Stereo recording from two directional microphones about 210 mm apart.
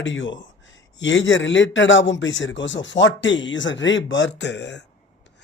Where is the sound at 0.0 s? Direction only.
60° left (ahead or behind).